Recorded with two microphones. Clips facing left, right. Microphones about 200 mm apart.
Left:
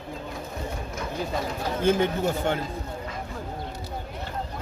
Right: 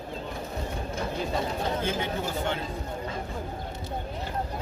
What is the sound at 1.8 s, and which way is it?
Speech, 50° left (ahead or behind).